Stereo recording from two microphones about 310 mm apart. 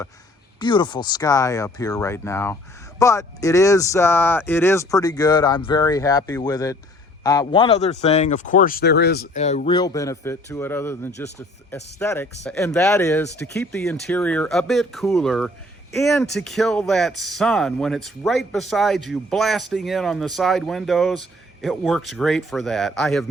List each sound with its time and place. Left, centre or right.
0.6 s speech: centre